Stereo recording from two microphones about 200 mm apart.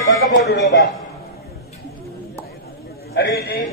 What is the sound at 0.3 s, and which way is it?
Speech, 60° left (ahead or behind).